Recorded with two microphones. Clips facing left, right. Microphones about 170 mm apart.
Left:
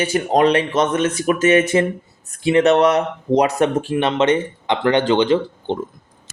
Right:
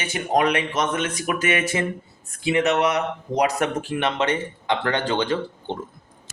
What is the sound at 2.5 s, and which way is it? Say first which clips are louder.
Speech: left 7 dB; 35° left (ahead or behind).